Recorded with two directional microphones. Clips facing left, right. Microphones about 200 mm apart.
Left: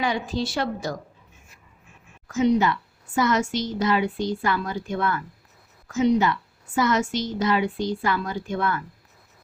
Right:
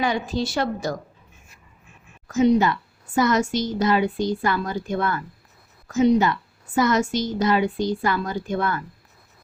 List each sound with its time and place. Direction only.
0.0 s a woman's voice: 45° right (ahead or behind)
2.2 s a woman's voice: 40° right (ahead or behind)